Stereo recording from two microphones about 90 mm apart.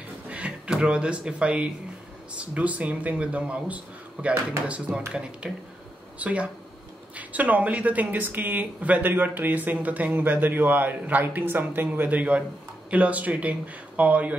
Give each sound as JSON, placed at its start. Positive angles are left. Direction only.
{"t": 0.3, "sound": "speech", "side_deg": -15}